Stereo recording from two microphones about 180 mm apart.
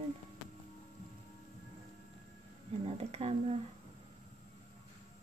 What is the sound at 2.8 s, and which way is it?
Speech, 35° right (ahead or behind).